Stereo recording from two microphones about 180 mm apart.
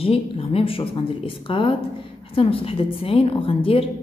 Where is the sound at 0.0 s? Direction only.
30° left (ahead or behind).